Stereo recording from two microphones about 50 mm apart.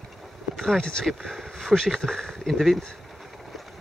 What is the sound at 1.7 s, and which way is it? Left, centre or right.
Speech, centre.